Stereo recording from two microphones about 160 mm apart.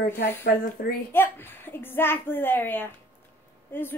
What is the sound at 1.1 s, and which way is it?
A woman's voice, 15° left (ahead or behind).